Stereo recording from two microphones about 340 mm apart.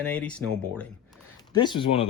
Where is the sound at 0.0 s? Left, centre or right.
Centre.